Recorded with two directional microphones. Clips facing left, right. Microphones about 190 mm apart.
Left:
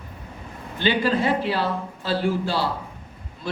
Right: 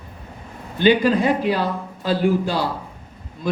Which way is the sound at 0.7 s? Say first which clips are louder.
Right 6 dB; 15° right (ahead or behind).